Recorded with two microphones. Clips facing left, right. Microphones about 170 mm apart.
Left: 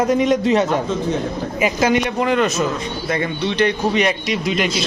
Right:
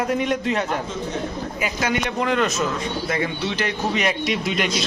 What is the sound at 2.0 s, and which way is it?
A man's voice, 5° left (ahead or behind).